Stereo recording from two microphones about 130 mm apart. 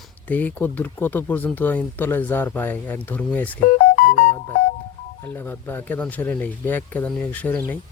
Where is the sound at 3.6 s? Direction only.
90° left.